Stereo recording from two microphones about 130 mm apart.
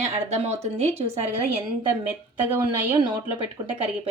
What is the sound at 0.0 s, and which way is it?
Speech, 60° right (ahead or behind).